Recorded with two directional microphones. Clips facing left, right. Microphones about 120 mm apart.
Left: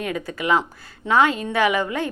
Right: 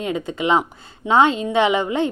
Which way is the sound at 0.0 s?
20° right (ahead or behind).